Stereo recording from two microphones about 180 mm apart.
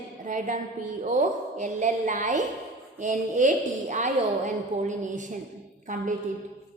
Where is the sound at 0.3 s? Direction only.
45° right (ahead or behind).